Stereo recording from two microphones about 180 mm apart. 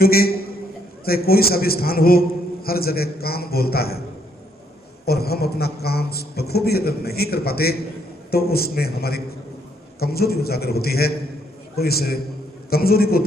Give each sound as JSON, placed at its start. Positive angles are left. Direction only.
{"t": 0.0, "sound": "a man's voice", "side_deg": 55}
{"t": 5.0, "sound": "a man's voice", "side_deg": 60}